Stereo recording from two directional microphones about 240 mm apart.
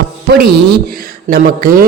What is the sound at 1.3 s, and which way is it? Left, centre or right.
Speech, right.